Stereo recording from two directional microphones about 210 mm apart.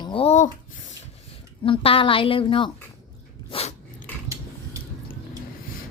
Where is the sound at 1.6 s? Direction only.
25° left (ahead or behind).